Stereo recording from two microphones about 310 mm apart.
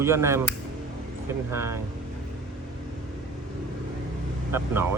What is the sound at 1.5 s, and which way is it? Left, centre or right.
Speech, centre.